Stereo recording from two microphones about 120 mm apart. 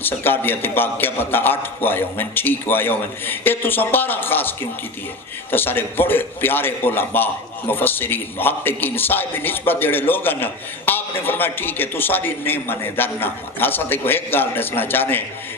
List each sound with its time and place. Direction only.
0.0 s a man's voice: 15° left (ahead or behind)